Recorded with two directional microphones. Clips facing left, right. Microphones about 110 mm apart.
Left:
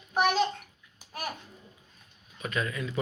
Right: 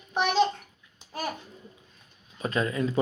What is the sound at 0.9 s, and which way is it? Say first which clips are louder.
Babbling: right 4 dB; 30° right (ahead or behind).